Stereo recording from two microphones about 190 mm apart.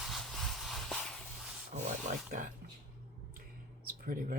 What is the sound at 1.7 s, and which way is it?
Speech, 40° right (ahead or behind).